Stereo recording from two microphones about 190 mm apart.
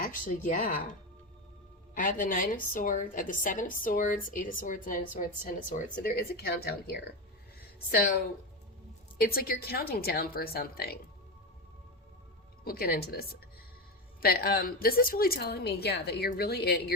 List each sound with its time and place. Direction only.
0.0 s speech: 45° left (ahead or behind)
2.0 s a woman's voice: 45° left (ahead or behind)
9.1 s a woman's voice: 55° left (ahead or behind)
12.6 s a woman's voice: 55° left (ahead or behind)